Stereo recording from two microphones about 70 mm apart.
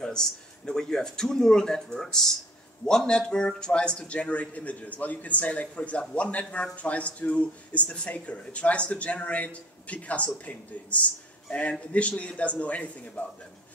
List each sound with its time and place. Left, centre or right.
0.7 s a man's voice: centre